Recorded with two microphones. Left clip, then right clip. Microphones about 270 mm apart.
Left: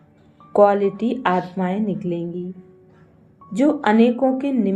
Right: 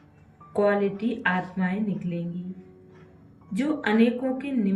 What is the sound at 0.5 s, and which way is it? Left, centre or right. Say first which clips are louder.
A woman's voice: left 8 dB; centre.